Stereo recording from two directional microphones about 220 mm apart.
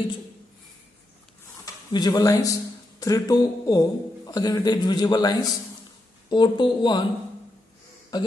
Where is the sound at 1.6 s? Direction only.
20° left (ahead or behind).